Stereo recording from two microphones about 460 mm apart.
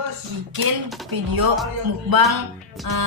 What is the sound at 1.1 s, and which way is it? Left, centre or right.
Speech, right.